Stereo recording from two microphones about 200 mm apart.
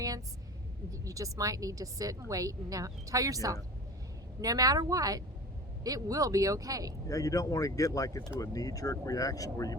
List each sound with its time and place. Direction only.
0.9 s a woman's voice: 15° right (ahead or behind)
7.1 s speech: 15° left (ahead or behind)